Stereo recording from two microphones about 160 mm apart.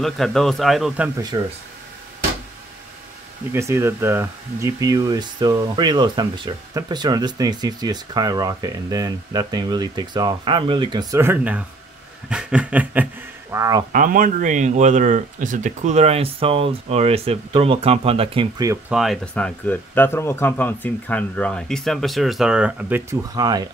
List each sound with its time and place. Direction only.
0.0 s speech: centre (ahead or behind)
1.3 s speech: 30° right (ahead or behind)
3.5 s speech: 15° right (ahead or behind)
12.3 s a sound: 5° right (ahead or behind)
13.6 s speech: 20° right (ahead or behind)
13.9 s speech: 60° right (ahead or behind); by 18.5 s 35° right (ahead or behind)
18.9 s speech: centre (ahead or behind)
23.3 s speech: 25° right (ahead or behind)